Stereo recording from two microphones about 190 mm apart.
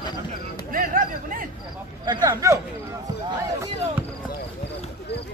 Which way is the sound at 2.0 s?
20° right (ahead or behind).